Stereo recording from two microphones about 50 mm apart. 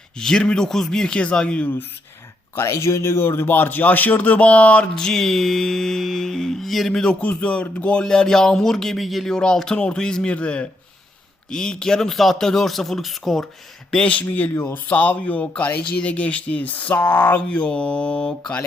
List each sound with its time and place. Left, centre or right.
0.2 s speech: centre
2.6 s speech: left
4.9 s music: centre
7.2 s speech: left
8.0 s speech: centre
9.2 s speech: centre
11.4 s music: centre
13.9 s speech: left
14.6 s speech: left; by 18.5 s centre